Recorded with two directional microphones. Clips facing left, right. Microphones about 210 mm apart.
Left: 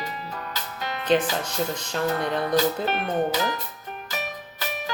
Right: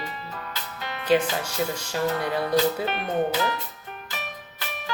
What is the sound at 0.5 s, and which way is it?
Music, 40° left (ahead or behind).